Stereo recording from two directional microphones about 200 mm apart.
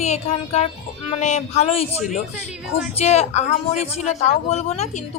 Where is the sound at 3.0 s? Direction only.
35° left (ahead or behind).